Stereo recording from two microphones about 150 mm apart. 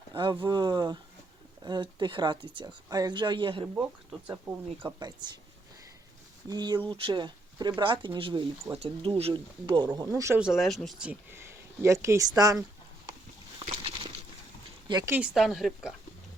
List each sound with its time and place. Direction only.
0.1 s speech: 30° right (ahead or behind)
4.3 s speech: 10° right (ahead or behind)
4.9 s speech: 30° right (ahead or behind)
6.5 s speech: 30° right (ahead or behind)
10.1 s speech: 15° right (ahead or behind)
10.4 s speech: centre (ahead or behind); by 12.6 s 25° right (ahead or behind)
13.7 s a sound: 40° right (ahead or behind)
15.0 s speech: 10° right (ahead or behind)